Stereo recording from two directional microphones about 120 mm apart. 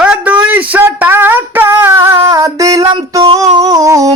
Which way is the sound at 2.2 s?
30° right (ahead or behind).